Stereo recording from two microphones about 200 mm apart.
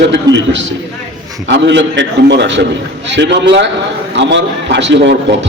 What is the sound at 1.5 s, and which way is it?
A man's voice, 65° right (ahead or behind).